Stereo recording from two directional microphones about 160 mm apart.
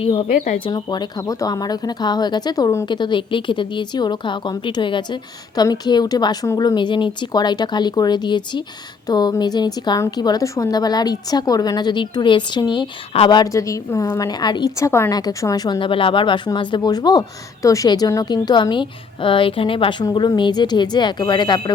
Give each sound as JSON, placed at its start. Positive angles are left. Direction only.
{"t": 0.0, "sound": "a woman's voice", "side_deg": 35}